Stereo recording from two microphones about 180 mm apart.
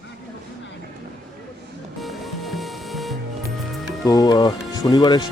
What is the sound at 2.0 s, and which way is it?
Music, centre (ahead or behind).